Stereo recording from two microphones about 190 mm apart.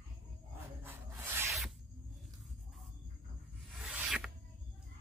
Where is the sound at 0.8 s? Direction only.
10° right (ahead or behind).